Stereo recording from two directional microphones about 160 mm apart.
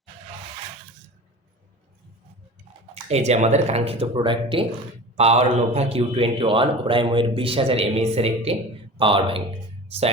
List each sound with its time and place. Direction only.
2.9 s a man's voice: 45° right (ahead or behind)